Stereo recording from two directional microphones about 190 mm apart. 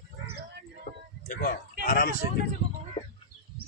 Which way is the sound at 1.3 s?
45° left (ahead or behind).